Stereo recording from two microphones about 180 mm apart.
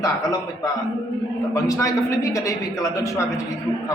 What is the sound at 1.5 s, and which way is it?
A man's voice, 20° left (ahead or behind).